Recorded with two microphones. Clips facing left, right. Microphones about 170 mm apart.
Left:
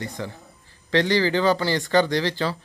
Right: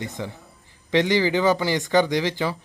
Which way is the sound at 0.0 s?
20° right (ahead or behind).